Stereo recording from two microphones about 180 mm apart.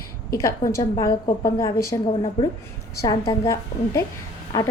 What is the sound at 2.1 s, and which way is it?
Speech, 30° left (ahead or behind).